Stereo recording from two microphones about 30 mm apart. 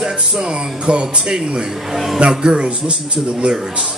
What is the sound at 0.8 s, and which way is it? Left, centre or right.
Speech, right.